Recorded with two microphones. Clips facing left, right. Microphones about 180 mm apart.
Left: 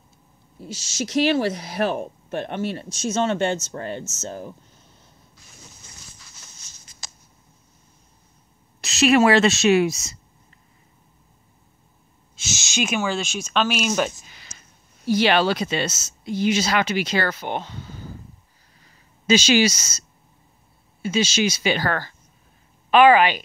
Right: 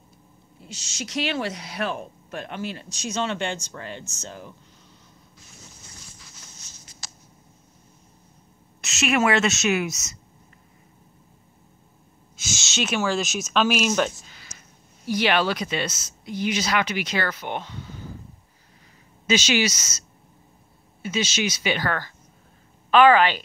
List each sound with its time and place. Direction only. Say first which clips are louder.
0.6 s speech: left 7 dB; 45° left (ahead or behind)
3.2 s speech: left 5 dB; 45° left (ahead or behind)
8.8 s a woman's voice: left 6 dB; 35° left (ahead or behind)
12.4 s a sound: left 1 dB; 25° left (ahead or behind)
12.7 s a woman's voice: left 2 dB; 10° left (ahead or behind)
13.0 s speech: right 1 dB; centre (ahead or behind)
15.0 s speech: left 4 dB; 30° left (ahead or behind)
19.2 s a woman's voice: left 5 dB; 35° left (ahead or behind)
21.0 s a woman's voice: left 4 dB; 30° left (ahead or behind)
22.8 s a woman's voice: left 2 dB; 15° left (ahead or behind)